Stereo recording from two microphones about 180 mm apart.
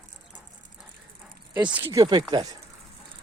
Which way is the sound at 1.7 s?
10° right (ahead or behind).